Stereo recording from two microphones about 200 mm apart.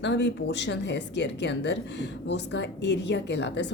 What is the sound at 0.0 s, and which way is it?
A woman's voice, 60° left (ahead or behind).